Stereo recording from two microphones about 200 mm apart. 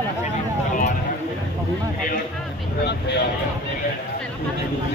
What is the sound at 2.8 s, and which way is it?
Speech, 55° left (ahead or behind).